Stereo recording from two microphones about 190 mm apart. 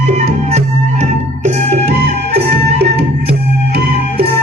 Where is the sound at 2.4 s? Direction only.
60° right (ahead or behind).